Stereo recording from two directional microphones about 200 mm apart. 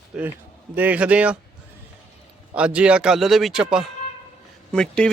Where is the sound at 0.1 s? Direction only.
5° right (ahead or behind).